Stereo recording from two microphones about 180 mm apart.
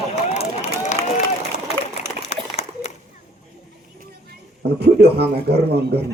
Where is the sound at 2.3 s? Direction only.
35° left (ahead or behind).